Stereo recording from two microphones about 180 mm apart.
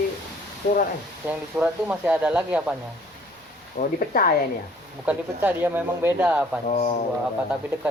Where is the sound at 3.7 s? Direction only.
50° left (ahead or behind).